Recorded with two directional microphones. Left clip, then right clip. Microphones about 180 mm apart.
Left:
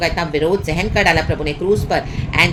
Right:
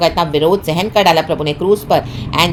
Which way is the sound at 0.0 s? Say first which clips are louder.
Right 5 dB; 30° right (ahead or behind).